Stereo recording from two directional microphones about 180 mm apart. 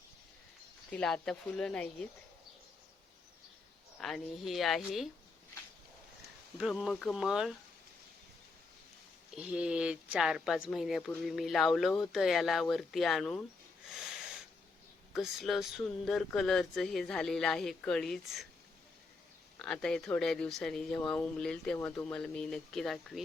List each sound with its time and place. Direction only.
0.9 s speech: 5° left (ahead or behind)
4.0 s speech: centre (ahead or behind)
6.6 s speech: 5° right (ahead or behind)
9.3 s speech: 5° right (ahead or behind)
15.1 s speech: centre (ahead or behind)
19.5 s speech: 5° left (ahead or behind)